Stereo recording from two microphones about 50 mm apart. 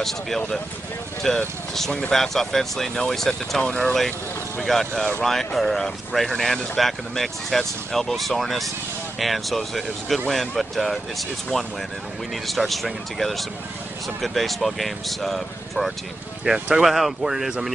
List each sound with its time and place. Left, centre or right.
1.2 s speech: centre
3.6 s speech: left
4.6 s speech: centre
16.5 s speech: centre
16.8 s speech: centre